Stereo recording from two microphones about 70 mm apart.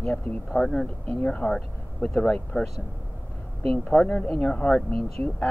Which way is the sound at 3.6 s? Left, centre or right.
Centre.